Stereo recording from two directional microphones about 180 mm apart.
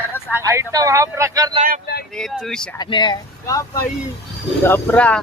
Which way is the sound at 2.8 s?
25° left (ahead or behind).